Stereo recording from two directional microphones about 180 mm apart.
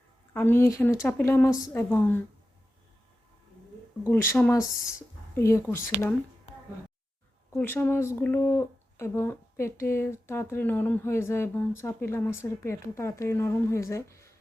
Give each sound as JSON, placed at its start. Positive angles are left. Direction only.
{"t": 0.3, "sound": "speech", "side_deg": 10}
{"t": 4.1, "sound": "speech", "side_deg": 15}
{"t": 7.5, "sound": "speech", "side_deg": 10}